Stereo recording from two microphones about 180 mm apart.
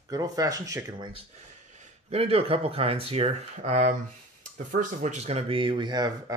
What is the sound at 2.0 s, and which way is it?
Speech, 35° right (ahead or behind).